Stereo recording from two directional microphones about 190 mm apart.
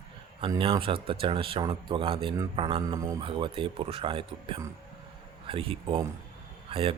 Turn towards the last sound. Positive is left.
turn(degrees=-30)  # may be behind; listen again after turning